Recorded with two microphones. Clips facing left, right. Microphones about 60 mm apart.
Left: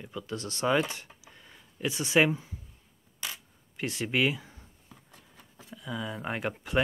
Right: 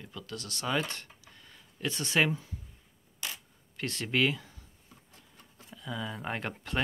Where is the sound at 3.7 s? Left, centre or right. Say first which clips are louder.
Left 2 dB; centre.